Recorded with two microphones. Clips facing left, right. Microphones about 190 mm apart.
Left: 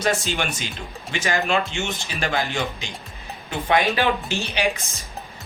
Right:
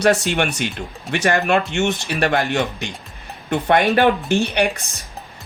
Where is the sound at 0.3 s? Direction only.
65° right (ahead or behind).